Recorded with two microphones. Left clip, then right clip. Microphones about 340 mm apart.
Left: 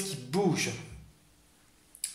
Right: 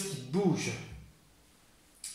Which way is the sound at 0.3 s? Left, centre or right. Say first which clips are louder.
Left 3 dB; left.